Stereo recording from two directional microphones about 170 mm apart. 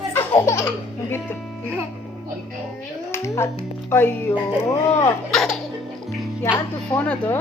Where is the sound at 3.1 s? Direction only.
15° left (ahead or behind).